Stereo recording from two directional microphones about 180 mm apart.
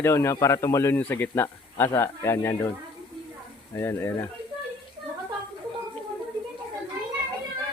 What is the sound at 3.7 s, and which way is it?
Speech, 15° left (ahead or behind).